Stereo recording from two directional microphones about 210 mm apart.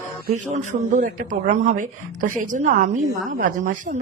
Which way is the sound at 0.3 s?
35° right (ahead or behind).